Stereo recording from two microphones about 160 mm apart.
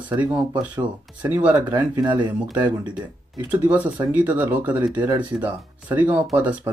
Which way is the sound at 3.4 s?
10° right (ahead or behind).